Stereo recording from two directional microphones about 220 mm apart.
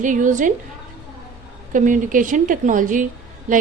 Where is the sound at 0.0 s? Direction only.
35° right (ahead or behind).